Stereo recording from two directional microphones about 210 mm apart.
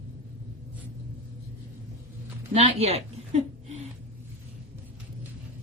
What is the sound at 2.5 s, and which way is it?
Speech, 30° right (ahead or behind).